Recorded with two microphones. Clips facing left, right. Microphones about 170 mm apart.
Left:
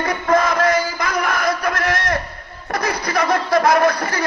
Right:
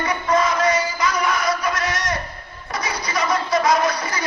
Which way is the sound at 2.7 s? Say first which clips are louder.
Left 5 dB; 60° left (ahead or behind).